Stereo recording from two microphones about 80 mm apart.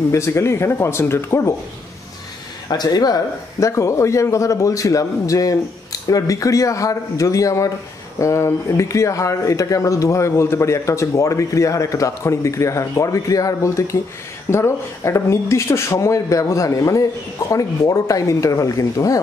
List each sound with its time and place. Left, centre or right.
0.1 s speech: left
2.7 s speech: left